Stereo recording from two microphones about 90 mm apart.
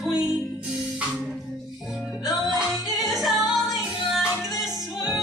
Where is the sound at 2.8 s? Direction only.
45° left (ahead or behind).